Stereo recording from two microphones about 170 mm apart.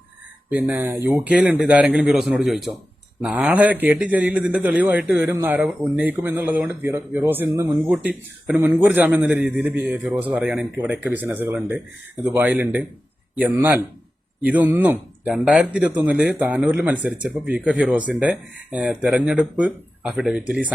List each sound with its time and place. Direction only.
0.5 s speech: 10° right (ahead or behind)